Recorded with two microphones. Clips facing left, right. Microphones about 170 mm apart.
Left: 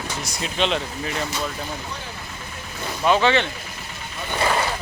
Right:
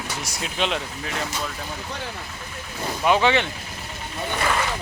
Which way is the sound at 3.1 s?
15° right (ahead or behind).